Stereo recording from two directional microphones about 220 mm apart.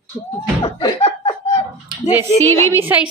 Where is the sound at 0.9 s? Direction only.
30° left (ahead or behind).